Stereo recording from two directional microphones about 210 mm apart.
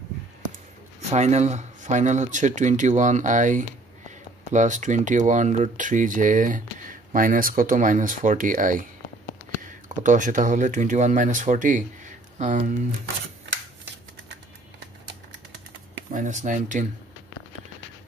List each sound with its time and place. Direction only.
1.1 s speech: 30° right (ahead or behind)
9.8 s speech: 35° right (ahead or behind)
16.1 s speech: 35° right (ahead or behind)